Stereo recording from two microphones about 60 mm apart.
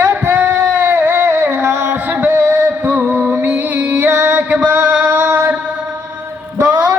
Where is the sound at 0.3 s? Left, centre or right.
Right.